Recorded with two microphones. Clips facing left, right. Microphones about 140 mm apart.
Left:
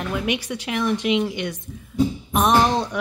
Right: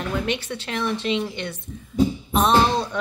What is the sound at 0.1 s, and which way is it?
Speech, 10° left (ahead or behind).